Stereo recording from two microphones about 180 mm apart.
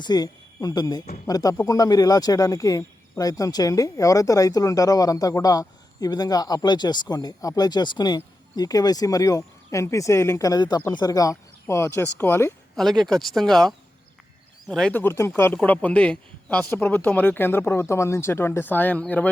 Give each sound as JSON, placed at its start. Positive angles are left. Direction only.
{"t": 0.0, "sound": "speech", "side_deg": 20}
{"t": 12.7, "sound": "speech", "side_deg": 0}